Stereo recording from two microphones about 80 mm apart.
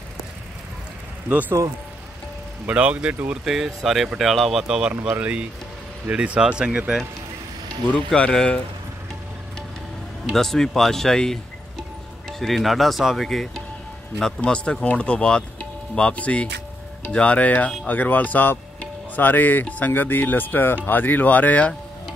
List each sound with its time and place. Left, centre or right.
1.6 s speech: right
2.6 s speech: centre
3.4 s speech: centre
7.6 s speech: centre
10.3 s speech: centre
14.2 s speech: centre